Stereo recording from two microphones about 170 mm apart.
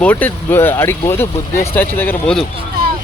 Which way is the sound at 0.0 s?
10° left (ahead or behind).